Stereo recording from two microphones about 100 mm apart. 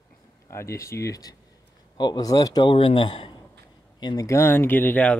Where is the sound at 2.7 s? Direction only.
60° left (ahead or behind).